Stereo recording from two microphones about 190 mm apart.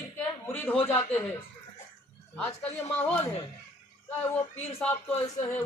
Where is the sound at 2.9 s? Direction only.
10° left (ahead or behind).